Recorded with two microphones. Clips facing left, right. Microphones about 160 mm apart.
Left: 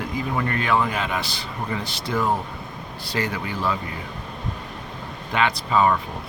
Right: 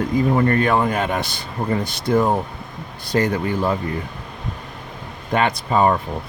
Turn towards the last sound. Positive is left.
turn(degrees=-45)  # may be behind; listen again after turning